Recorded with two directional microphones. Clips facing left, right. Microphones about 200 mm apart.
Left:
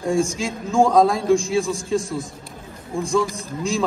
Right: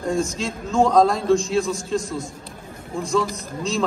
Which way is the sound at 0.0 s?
10° left (ahead or behind).